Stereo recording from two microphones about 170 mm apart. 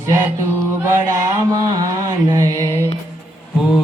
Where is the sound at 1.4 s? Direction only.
20° right (ahead or behind).